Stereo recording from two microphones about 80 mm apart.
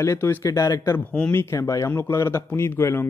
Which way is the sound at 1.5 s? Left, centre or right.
Left.